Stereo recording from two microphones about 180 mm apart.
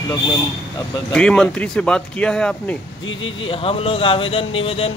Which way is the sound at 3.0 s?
90° left.